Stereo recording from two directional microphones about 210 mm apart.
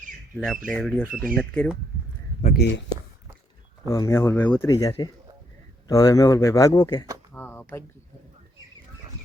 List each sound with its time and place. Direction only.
0.3 s speech: centre (ahead or behind)
2.4 s speech: 50° left (ahead or behind)
3.8 s speech: 15° left (ahead or behind)
7.3 s a sound: 10° left (ahead or behind)